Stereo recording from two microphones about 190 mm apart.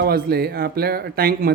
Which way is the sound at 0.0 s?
55° right (ahead or behind).